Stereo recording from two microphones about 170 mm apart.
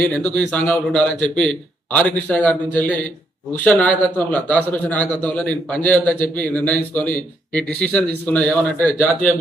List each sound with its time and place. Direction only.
0.0 s a man's voice: 10° left (ahead or behind)
3.6 s a man's voice: 10° left (ahead or behind)